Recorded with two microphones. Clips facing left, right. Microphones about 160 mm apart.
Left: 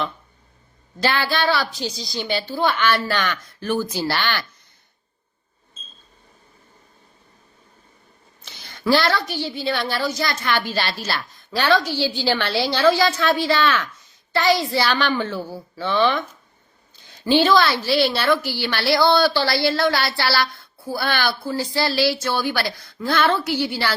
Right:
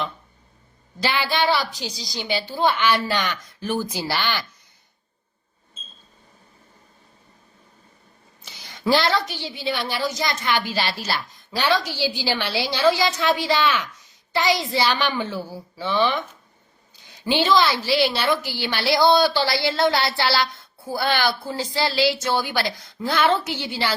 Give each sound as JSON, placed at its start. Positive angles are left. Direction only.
{"t": 0.9, "sound": "a woman's voice", "side_deg": -15}
{"t": 8.4, "sound": "a woman's voice", "side_deg": -15}
{"t": 17.2, "sound": "a woman's voice", "side_deg": -15}